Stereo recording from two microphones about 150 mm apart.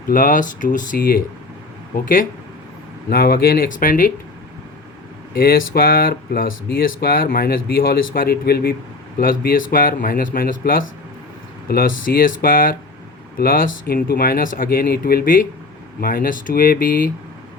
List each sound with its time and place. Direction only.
0.1 s speech: 65° left (ahead or behind)
3.1 s speech: 85° left; by 4.1 s 60° left (ahead or behind)
5.3 s speech: 80° left